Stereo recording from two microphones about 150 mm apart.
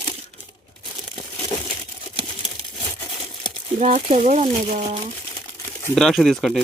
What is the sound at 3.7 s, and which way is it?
Speech, 50° right (ahead or behind).